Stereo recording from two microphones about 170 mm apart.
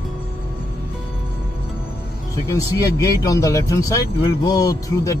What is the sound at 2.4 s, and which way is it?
Speech, 20° left (ahead or behind).